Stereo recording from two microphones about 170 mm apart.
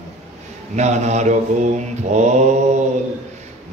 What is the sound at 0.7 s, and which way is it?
Mantra, 40° right (ahead or behind).